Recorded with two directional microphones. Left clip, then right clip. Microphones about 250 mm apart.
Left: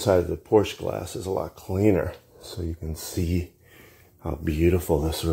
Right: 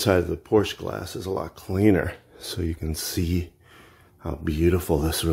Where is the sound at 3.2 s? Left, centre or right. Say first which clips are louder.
Right 1 dB; centre.